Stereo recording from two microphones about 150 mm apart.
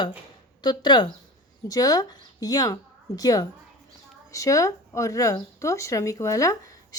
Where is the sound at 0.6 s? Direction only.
30° left (ahead or behind).